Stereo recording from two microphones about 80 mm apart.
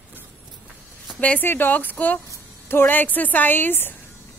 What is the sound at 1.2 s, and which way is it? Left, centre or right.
A woman's voice, left.